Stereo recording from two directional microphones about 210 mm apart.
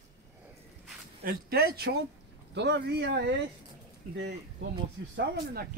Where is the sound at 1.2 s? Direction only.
50° right (ahead or behind).